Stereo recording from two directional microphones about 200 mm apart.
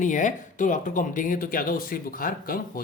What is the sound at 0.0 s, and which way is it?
Speech, 40° left (ahead or behind).